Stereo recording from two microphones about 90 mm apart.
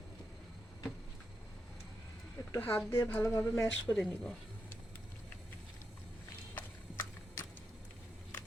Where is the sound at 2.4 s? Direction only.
35° left (ahead or behind).